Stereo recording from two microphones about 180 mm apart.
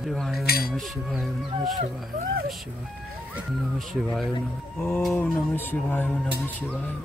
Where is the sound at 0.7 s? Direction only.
Centre (ahead or behind).